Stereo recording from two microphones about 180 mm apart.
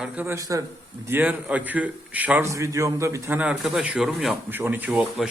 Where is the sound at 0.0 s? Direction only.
10° right (ahead or behind).